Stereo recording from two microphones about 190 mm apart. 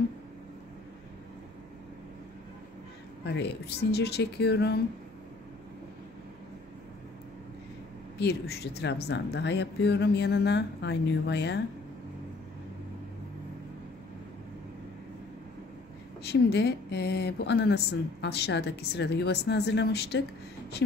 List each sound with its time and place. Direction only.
3.3 s speech: 60° left (ahead or behind)
8.2 s speech: 60° left (ahead or behind)
16.3 s speech: 60° left (ahead or behind)